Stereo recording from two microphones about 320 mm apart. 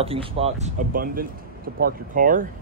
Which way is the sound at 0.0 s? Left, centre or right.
Centre.